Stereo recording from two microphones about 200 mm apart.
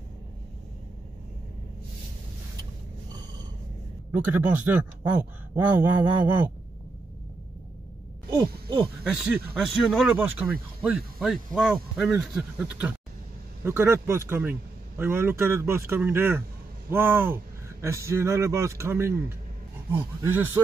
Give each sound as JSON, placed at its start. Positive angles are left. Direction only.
{"t": 4.1, "sound": "a man's voice", "side_deg": -10}
{"t": 8.3, "sound": "speech", "side_deg": -20}
{"t": 9.0, "sound": "a man's voice", "side_deg": -5}